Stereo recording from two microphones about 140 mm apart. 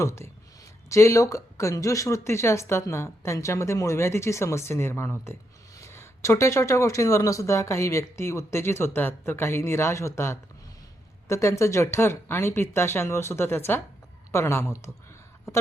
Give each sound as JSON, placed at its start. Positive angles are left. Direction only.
{"t": 0.0, "sound": "speech", "side_deg": 20}